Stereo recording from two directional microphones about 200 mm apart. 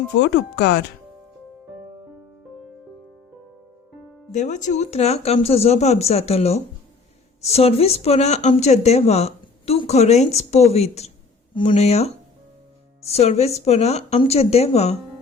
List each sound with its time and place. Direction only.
0.1 s speech: 60° left (ahead or behind)
4.3 s speech: 35° left (ahead or behind)